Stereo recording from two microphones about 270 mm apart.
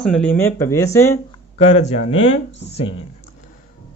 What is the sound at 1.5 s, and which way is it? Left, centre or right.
Speech, left.